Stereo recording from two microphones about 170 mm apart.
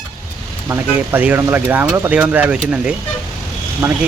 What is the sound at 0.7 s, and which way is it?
Speech, 10° right (ahead or behind).